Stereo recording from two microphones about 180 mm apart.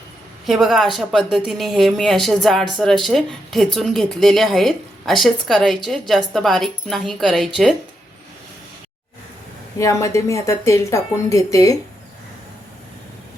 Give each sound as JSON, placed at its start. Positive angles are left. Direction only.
{"t": 0.4, "sound": "speech", "side_deg": 0}
{"t": 9.7, "sound": "speech", "side_deg": 15}